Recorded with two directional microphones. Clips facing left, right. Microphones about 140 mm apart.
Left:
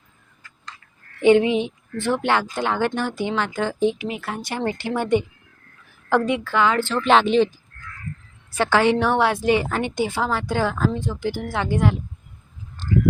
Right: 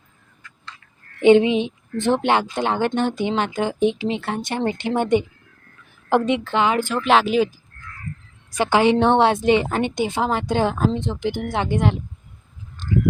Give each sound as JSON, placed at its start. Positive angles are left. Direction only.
{"t": 1.2, "sound": "a woman's voice", "side_deg": -20}
{"t": 7.0, "sound": "a woman's voice", "side_deg": 0}